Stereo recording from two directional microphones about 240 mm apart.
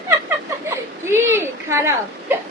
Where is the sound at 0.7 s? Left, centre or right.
Centre.